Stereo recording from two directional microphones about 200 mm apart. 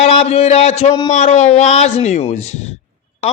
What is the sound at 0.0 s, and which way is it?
Speech, 35° left (ahead or behind).